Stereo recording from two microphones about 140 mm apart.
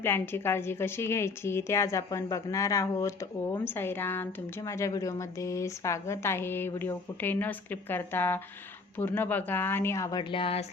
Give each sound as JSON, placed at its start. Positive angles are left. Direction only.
{"t": 0.0, "sound": "a woman's voice", "side_deg": 15}